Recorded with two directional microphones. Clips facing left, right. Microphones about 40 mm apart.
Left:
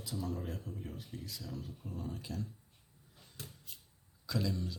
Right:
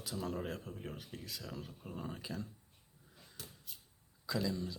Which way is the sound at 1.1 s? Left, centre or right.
Right.